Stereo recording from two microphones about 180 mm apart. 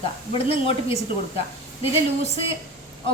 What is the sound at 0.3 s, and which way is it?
Speech, 30° left (ahead or behind).